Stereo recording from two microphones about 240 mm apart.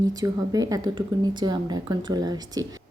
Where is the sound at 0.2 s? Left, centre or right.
Centre.